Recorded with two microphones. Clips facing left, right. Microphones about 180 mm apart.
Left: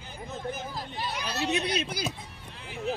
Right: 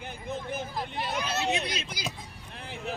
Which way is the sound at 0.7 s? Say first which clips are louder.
Right 2 dB; 55° right (ahead or behind).